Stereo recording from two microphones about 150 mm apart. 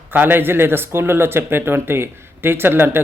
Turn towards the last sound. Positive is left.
turn(degrees=-15)  # may be behind; listen again after turning